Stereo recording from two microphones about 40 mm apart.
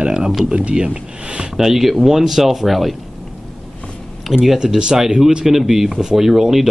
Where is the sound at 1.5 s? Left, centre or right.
Centre.